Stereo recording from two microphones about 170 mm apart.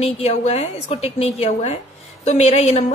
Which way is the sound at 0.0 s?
40° left (ahead or behind).